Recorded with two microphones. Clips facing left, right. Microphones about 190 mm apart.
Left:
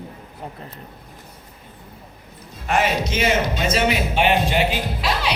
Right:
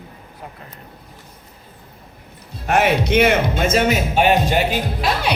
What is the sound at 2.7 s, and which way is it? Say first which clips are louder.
Speech: right 5 dB; 60° right (ahead or behind).